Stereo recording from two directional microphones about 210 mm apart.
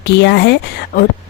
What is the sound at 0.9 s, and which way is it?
Speech, 40° left (ahead or behind).